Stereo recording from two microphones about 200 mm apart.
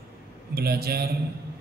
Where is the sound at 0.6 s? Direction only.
50° right (ahead or behind).